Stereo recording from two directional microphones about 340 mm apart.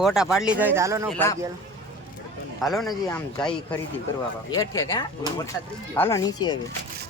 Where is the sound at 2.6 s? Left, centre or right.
Centre.